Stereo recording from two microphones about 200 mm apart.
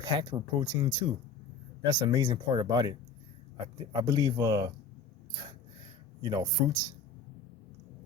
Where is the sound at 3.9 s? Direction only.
20° right (ahead or behind).